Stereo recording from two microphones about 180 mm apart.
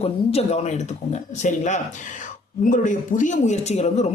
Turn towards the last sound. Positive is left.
turn(degrees=40)  # may be behind; listen again after turning